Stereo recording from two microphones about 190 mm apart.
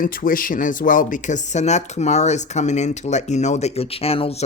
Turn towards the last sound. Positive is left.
turn(degrees=30)  # may be behind; listen again after turning